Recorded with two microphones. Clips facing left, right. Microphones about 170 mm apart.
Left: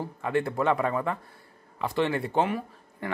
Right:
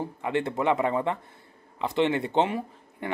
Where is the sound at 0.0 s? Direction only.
20° right (ahead or behind).